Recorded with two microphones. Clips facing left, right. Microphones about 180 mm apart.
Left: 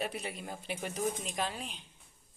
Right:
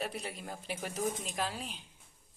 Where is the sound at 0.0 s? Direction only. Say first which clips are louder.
Left 1 dB; centre (ahead or behind).